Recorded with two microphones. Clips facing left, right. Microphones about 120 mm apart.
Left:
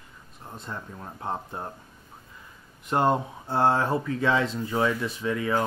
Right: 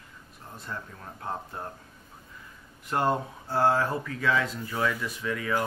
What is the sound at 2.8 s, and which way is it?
Speech, 20° left (ahead or behind).